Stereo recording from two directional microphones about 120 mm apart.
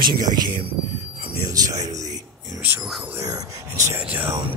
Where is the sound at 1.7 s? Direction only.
75° right (ahead or behind).